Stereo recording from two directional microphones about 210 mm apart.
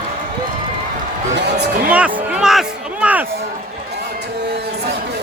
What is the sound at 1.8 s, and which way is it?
Music, 5° right (ahead or behind).